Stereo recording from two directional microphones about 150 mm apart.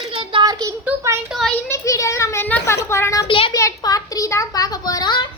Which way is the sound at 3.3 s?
35° left (ahead or behind).